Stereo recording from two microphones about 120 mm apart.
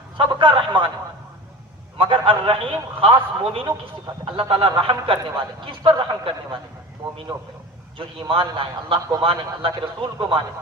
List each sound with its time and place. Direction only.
0.2 s a man's voice: 45° right (ahead or behind)
2.0 s a man's voice: 45° right (ahead or behind)